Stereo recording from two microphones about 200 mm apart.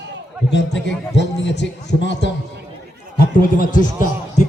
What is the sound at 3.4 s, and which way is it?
Speech, 45° left (ahead or behind).